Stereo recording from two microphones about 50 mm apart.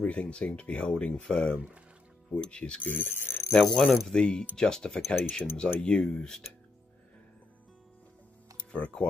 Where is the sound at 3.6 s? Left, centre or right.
Centre.